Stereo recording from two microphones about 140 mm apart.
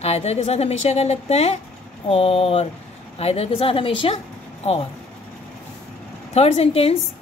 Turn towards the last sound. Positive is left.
turn(degrees=45)  # may be behind; listen again after turning